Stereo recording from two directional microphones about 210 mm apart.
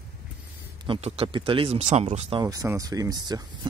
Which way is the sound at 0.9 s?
30° right (ahead or behind).